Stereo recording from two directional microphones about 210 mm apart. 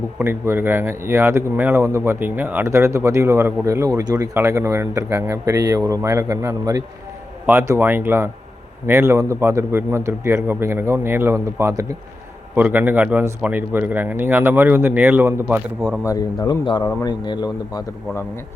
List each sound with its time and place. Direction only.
0.2 s speech: 10° right (ahead or behind)
16.0 s a man's voice: 15° left (ahead or behind)